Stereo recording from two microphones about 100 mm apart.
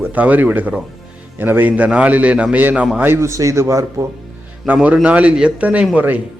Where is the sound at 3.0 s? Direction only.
25° right (ahead or behind).